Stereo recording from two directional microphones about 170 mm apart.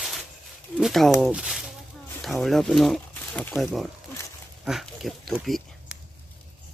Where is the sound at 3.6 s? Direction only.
Centre (ahead or behind).